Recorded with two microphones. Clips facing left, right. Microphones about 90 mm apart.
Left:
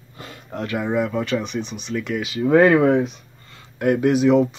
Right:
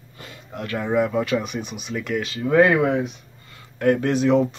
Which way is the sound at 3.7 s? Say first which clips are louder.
Left 2 dB; 15° left (ahead or behind).